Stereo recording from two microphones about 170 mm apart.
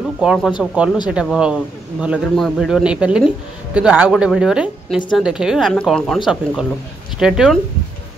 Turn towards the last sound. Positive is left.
turn(degrees=-5)  # may be behind; listen again after turning